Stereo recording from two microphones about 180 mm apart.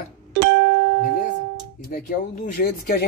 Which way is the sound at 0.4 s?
70° right (ahead or behind).